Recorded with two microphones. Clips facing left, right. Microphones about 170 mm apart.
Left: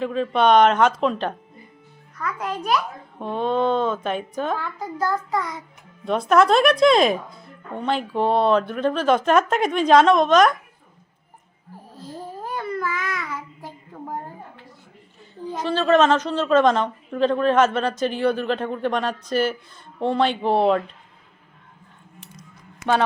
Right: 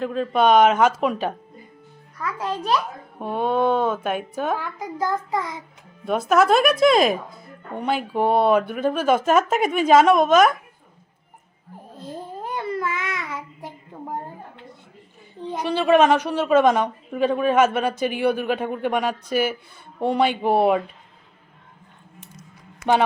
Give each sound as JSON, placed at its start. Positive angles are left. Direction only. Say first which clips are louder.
{"t": 0.0, "sound": "speech", "louder": "even", "side_deg": 0}
{"t": 2.2, "sound": "a child's voice", "louder": "right 1 dB", "side_deg": -30}
{"t": 3.2, "sound": "a woman's voice", "louder": "right 1 dB", "side_deg": -10}
{"t": 6.1, "sound": "a woman's voice", "louder": "left 1 dB", "side_deg": -5}
{"t": 11.9, "sound": "child singing", "louder": "right 1 dB", "side_deg": -20}
{"t": 15.5, "sound": "a woman's voice", "louder": "right 1 dB", "side_deg": -15}